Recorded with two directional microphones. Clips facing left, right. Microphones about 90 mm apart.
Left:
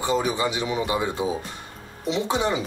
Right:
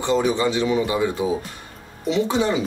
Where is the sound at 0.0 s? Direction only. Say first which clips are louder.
Right 4 dB; 10° left (ahead or behind).